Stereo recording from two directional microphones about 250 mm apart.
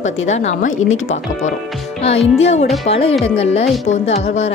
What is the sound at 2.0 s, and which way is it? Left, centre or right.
A woman's voice, left.